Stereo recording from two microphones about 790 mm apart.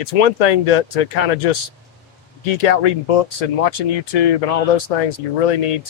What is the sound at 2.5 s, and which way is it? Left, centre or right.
Speech, left.